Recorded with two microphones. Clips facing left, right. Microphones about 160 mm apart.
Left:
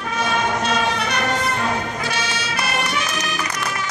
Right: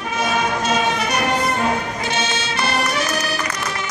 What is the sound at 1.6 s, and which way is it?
Music, 25° right (ahead or behind).